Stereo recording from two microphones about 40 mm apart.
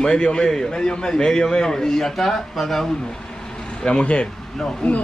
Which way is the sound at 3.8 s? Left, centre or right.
Left.